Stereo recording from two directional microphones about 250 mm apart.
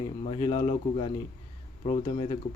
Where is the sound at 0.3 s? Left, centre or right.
Left.